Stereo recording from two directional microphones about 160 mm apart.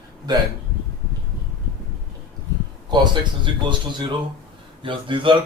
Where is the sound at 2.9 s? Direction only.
30° right (ahead or behind).